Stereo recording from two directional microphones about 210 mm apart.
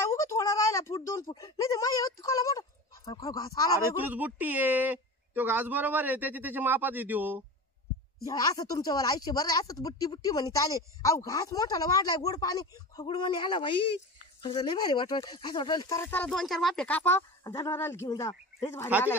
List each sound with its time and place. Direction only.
0.0 s speech: 15° left (ahead or behind)
3.9 s speech: 10° right (ahead or behind)
8.3 s speech: 15° left (ahead or behind)